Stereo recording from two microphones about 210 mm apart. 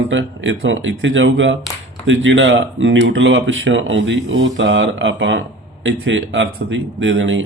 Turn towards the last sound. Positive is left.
turn(degrees=-65)  # may be behind; listen again after turning